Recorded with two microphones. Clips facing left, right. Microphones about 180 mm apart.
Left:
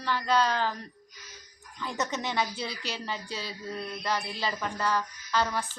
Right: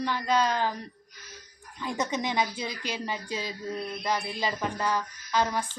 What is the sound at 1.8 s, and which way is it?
Speech, 15° right (ahead or behind).